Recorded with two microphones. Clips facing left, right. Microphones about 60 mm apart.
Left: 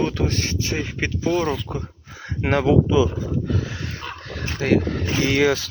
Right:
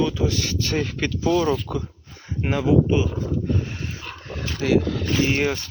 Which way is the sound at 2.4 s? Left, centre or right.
Left.